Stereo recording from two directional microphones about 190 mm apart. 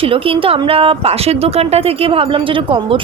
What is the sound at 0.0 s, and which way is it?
A woman's voice, 30° right (ahead or behind).